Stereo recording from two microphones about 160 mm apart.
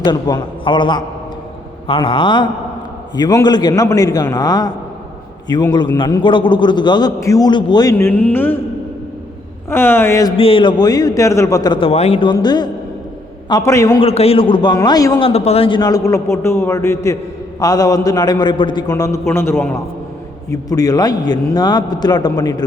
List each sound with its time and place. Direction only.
0.0 s a man's voice: 25° left (ahead or behind)
7.9 s speech: 15° left (ahead or behind)
9.6 s speech: 15° left (ahead or behind)
10.3 s a man's voice: 35° left (ahead or behind)
14.0 s a man's voice: 40° left (ahead or behind); by 15.2 s 20° left (ahead or behind)
15.2 s a man's voice: 40° left (ahead or behind); by 22.6 s 25° left (ahead or behind)